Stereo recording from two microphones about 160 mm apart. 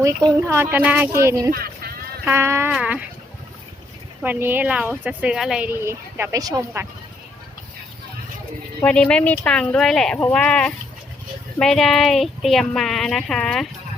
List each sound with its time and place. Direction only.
0.0 s speech: 20° right (ahead or behind)
4.2 s speech: 10° right (ahead or behind)
8.8 s speech: 5° left (ahead or behind)